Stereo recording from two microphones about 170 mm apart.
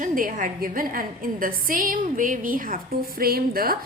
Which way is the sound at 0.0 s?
50° right (ahead or behind).